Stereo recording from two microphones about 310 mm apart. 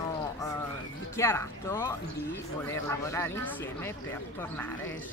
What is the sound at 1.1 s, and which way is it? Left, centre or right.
Speech, centre.